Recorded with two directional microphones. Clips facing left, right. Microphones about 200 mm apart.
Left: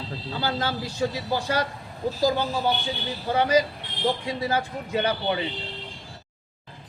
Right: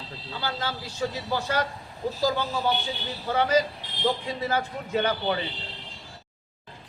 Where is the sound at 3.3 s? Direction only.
10° left (ahead or behind).